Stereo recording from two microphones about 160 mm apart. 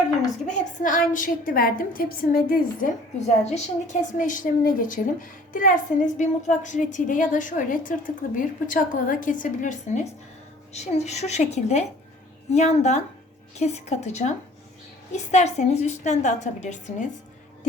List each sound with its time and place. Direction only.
0.4 s a woman's voice: 55° left (ahead or behind)
3.2 s a woman's voice: 45° left (ahead or behind)